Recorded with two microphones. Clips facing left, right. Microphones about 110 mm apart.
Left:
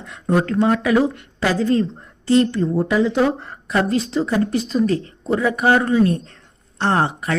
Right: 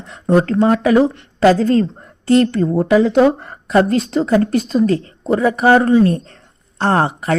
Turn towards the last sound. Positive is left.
turn(degrees=-45)  # may be behind; listen again after turning